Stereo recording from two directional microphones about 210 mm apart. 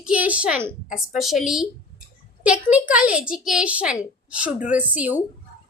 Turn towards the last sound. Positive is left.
turn(degrees=-5)  # may be behind; listen again after turning